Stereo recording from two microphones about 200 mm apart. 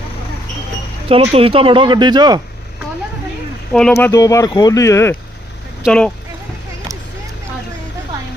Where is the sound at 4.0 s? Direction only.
15° left (ahead or behind).